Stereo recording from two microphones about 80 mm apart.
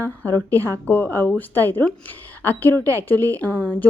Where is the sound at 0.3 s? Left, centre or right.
Right.